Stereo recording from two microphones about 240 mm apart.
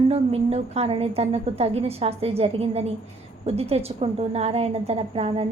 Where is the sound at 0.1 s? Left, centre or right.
Right.